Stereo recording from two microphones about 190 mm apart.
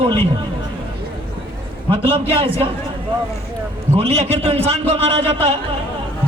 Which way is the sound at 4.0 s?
30° right (ahead or behind).